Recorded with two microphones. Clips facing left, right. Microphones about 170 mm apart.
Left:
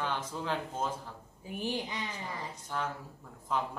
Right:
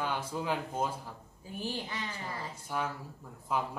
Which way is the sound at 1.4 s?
15° left (ahead or behind).